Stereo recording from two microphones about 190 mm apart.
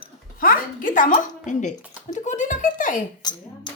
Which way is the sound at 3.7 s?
25° left (ahead or behind).